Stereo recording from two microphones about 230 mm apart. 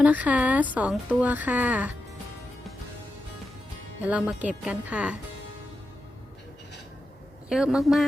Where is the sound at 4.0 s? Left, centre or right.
Centre.